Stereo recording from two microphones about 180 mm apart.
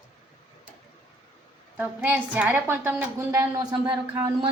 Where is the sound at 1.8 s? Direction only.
10° right (ahead or behind).